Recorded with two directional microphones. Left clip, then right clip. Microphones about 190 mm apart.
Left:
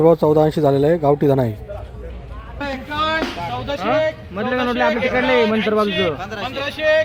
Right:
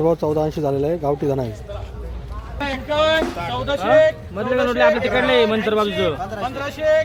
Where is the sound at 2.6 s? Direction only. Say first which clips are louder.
Right 3 dB; 35° right (ahead or behind).